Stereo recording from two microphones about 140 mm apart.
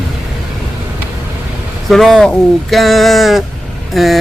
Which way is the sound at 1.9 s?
Centre (ahead or behind).